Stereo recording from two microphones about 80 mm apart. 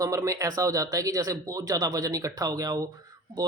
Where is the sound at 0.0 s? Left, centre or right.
Right.